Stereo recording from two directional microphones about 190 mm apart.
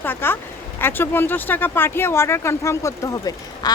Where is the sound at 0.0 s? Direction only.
10° left (ahead or behind).